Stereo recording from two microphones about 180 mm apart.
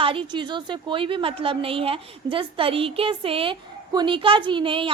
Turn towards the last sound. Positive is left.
turn(degrees=-30)  # may be behind; listen again after turning